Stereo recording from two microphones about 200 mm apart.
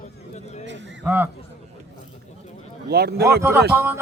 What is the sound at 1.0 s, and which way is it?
Speech, 10° right (ahead or behind).